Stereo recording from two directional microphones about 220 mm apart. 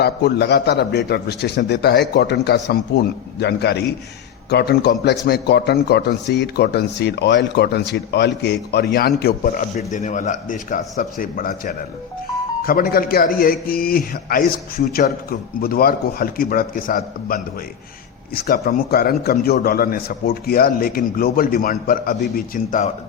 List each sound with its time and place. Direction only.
0.0 s a man's voice: 50° left (ahead or behind)